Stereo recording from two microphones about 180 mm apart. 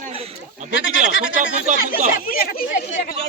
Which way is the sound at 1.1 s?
90° left.